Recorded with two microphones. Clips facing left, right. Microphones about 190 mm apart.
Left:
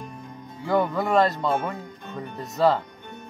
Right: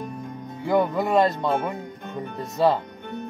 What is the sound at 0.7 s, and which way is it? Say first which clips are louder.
Speech: right 1 dB; 20° right (ahead or behind).